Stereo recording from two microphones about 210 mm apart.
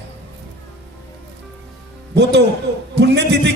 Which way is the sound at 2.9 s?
55° right (ahead or behind).